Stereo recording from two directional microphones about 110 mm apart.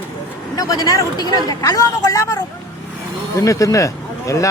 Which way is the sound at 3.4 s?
30° left (ahead or behind).